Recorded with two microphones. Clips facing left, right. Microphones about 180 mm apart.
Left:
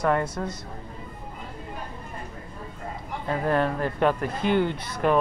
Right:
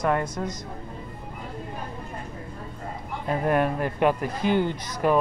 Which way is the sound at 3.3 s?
15° right (ahead or behind).